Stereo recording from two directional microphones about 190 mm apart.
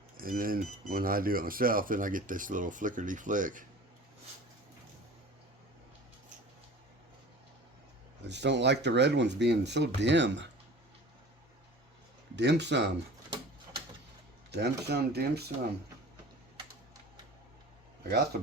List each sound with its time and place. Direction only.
0.2 s speech: 50° right (ahead or behind)
8.2 s speech: 65° right (ahead or behind)
12.4 s speech: 65° right (ahead or behind)
14.5 s speech: 60° right (ahead or behind)